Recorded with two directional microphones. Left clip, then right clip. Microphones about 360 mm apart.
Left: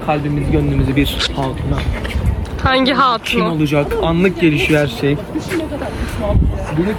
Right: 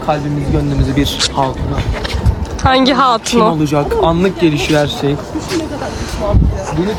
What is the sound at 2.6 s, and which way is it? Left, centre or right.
Speech, centre.